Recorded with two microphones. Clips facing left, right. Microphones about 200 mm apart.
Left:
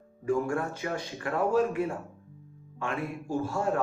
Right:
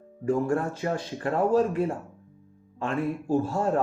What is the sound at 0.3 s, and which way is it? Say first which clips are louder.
Speech: right 3 dB; 35° right (ahead or behind).